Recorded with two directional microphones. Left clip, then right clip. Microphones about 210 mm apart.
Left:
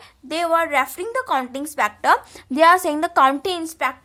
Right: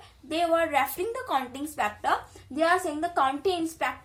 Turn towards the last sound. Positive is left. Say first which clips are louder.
# left 4 dB
turn(degrees=30)  # may be behind; listen again after turning